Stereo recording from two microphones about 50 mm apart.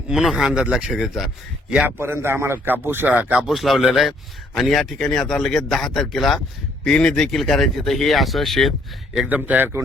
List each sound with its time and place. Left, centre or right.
0.1 s speech: centre
0.4 s speech: centre
0.9 s speech: centre
2.0 s a man's voice: right
3.1 s speech: right
3.4 s speech: centre
6.8 s speech: centre
7.3 s speech: centre
9.3 s speech: right